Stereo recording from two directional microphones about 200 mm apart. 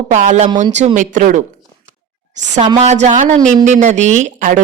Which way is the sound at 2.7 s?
35° right (ahead or behind).